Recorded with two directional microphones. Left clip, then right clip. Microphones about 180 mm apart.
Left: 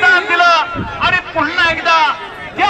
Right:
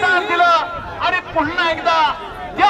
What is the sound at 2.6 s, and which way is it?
Speech, 30° left (ahead or behind).